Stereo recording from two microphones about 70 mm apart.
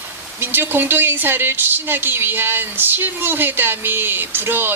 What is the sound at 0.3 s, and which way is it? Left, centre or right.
A woman's voice, right.